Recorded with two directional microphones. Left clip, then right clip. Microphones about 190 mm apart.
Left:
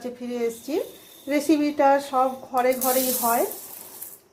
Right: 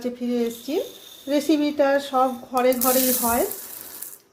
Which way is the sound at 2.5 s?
15° right (ahead or behind).